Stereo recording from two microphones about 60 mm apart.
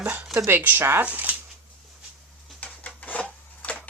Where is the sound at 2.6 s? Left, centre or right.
Left.